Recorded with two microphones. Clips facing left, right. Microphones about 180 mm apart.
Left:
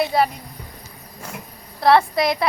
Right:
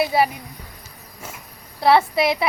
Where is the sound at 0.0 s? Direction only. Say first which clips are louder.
Even; 5° right (ahead or behind).